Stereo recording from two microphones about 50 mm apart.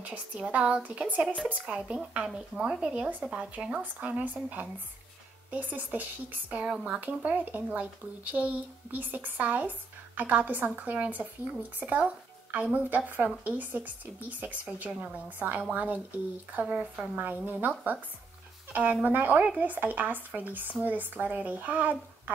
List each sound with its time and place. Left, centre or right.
0.0 s speech: right
1.7 s a woman's voice: centre
4.2 s speech: right
6.7 s a woman's voice: centre
7.0 s speech: right
16.9 s a woman's voice: centre
17.2 s speech: right